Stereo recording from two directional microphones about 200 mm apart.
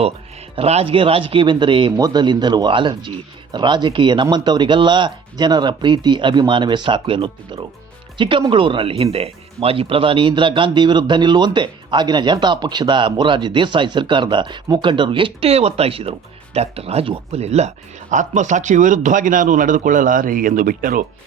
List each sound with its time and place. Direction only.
0.5 s a man's voice: 30° right (ahead or behind)